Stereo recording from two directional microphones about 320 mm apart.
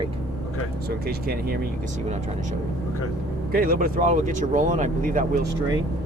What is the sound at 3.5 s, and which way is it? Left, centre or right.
Speech, right.